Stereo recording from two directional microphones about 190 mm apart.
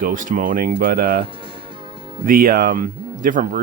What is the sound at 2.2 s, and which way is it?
Speech, 50° right (ahead or behind).